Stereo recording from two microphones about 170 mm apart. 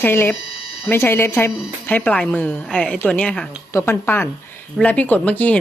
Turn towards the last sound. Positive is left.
turn(degrees=10)  # may be behind; listen again after turning